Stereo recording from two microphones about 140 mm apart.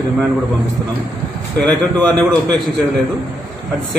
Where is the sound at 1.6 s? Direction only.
5° left (ahead or behind).